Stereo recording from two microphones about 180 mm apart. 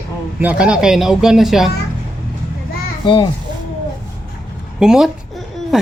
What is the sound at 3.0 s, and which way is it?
Speech, 25° left (ahead or behind).